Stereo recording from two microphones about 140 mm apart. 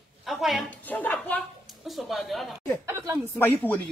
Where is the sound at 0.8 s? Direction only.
10° left (ahead or behind).